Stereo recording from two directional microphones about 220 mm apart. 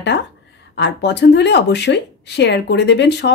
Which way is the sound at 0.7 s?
50° left (ahead or behind).